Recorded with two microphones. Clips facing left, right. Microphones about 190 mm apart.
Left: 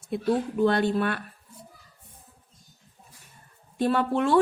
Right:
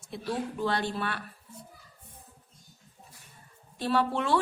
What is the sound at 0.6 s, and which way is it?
Speech, 50° left (ahead or behind).